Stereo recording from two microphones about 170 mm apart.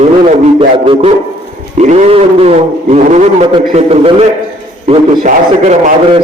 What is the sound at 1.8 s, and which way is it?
A man's voice, 40° right (ahead or behind).